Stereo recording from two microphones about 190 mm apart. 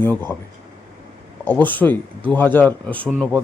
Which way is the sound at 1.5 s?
10° left (ahead or behind).